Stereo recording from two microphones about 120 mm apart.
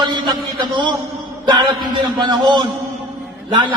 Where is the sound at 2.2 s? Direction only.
40° right (ahead or behind).